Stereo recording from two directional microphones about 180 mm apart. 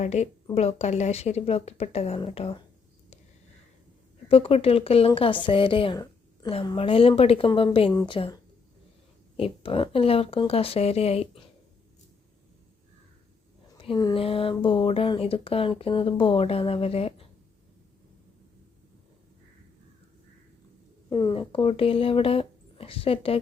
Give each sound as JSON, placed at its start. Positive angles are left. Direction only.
{"t": 0.0, "sound": "speech", "side_deg": 40}
{"t": 4.3, "sound": "a woman's voice", "side_deg": 30}
{"t": 9.4, "sound": "speech", "side_deg": 30}
{"t": 13.7, "sound": "speech", "side_deg": 25}
{"t": 21.1, "sound": "speech", "side_deg": 25}